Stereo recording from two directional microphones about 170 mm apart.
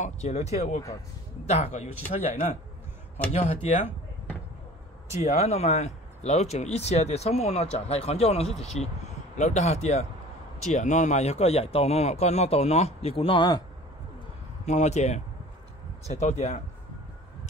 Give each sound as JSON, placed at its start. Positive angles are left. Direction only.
{"t": 0.0, "sound": "speech", "side_deg": 40}
{"t": 3.3, "sound": "speech", "side_deg": 40}
{"t": 5.1, "sound": "speech", "side_deg": 40}
{"t": 14.7, "sound": "speech", "side_deg": 40}